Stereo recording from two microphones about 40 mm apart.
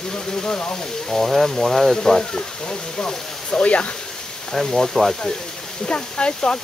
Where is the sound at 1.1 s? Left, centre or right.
Centre.